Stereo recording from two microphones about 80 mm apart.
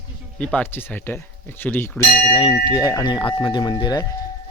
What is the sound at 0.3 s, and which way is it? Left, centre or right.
Speech, centre.